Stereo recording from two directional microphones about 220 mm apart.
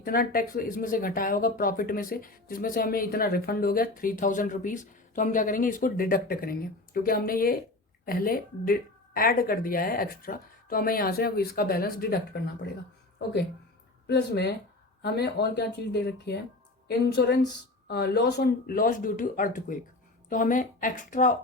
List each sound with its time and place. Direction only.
0.0 s speech: 40° left (ahead or behind)
14.1 s speech: 50° left (ahead or behind)